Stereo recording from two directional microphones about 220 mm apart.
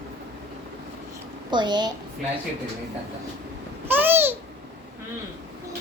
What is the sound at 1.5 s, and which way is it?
Speech, 20° right (ahead or behind).